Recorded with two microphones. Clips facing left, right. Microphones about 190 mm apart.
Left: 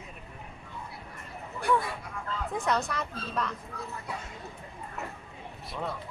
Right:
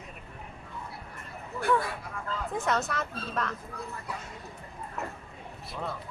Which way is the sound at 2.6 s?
5° right (ahead or behind).